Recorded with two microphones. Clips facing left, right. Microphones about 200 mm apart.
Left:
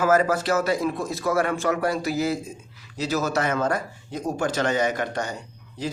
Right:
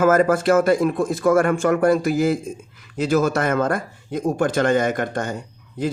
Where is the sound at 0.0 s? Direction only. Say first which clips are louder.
Right 5 dB; 50° right (ahead or behind).